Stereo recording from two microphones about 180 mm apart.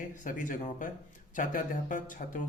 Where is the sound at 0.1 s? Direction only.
45° left (ahead or behind).